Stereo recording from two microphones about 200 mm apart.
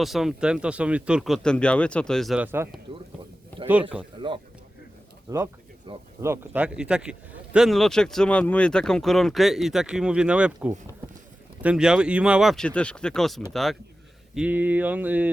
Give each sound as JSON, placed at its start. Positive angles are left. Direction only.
{"t": 0.0, "sound": "speech", "side_deg": 0}
{"t": 2.9, "sound": "a sound", "side_deg": -25}
{"t": 3.7, "sound": "speech", "side_deg": -5}
{"t": 4.2, "sound": "a sound", "side_deg": -25}
{"t": 5.3, "sound": "speech", "side_deg": -20}
{"t": 6.2, "sound": "speech", "side_deg": -10}